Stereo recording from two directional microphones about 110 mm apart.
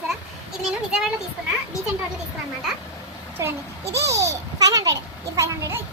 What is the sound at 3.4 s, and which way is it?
A child's voice, 25° right (ahead or behind).